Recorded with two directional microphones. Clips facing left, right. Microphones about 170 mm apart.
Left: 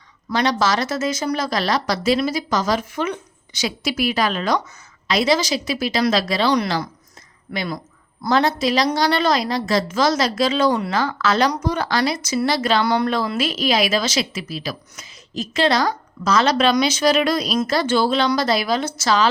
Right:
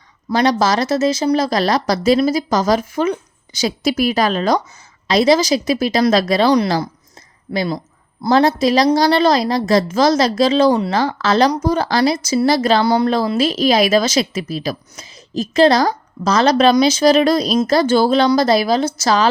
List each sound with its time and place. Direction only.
0.3 s a woman's voice: 35° right (ahead or behind)